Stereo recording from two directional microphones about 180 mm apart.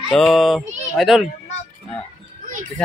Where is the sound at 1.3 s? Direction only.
40° left (ahead or behind).